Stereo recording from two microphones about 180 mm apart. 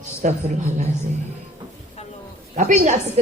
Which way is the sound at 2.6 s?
40° right (ahead or behind).